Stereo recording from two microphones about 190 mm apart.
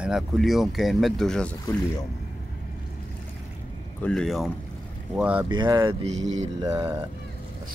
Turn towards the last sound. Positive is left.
turn(degrees=-20)  # may be behind; listen again after turning